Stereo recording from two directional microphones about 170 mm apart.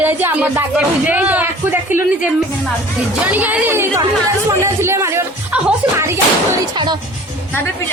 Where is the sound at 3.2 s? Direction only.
10° right (ahead or behind).